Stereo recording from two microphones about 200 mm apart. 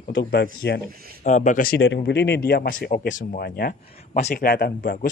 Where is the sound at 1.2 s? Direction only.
35° left (ahead or behind).